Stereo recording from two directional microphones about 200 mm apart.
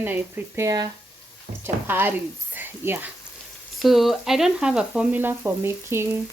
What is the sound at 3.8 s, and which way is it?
Speech, centre (ahead or behind).